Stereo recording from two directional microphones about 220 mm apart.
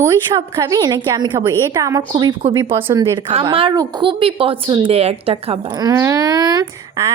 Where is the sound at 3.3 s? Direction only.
25° right (ahead or behind).